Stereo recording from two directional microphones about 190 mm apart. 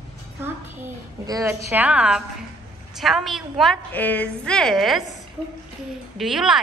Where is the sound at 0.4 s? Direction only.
15° right (ahead or behind); by 5.1 s centre (ahead or behind).